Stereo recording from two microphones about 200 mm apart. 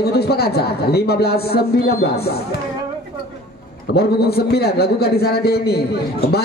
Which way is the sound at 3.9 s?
55° left (ahead or behind).